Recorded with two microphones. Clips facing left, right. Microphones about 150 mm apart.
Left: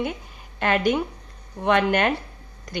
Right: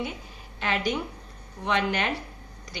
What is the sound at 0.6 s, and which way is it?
A woman's voice, 55° left (ahead or behind).